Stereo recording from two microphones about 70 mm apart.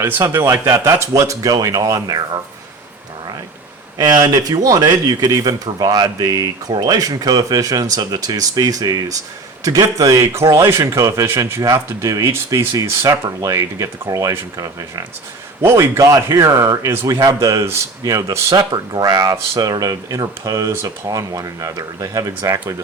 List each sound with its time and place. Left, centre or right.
0.0 s a man's voice: right
0.5 s speech: right
3.9 s a man's voice: right
10.3 s a man's voice: right
11.6 s speech: right
13.5 s a man's voice: right
15.6 s a man's voice: right
18.7 s a man's voice: right